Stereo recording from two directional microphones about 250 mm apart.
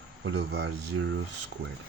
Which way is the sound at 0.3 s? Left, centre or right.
Right.